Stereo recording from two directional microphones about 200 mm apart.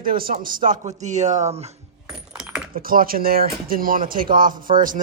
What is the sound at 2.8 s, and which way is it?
Speech, 45° right (ahead or behind).